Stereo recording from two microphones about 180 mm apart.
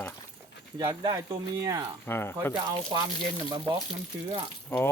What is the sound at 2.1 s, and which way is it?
Speech, 15° left (ahead or behind).